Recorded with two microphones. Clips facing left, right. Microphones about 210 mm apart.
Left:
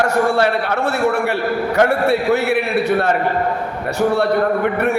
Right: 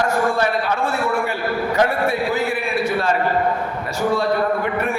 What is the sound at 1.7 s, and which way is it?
Speech, 65° left (ahead or behind).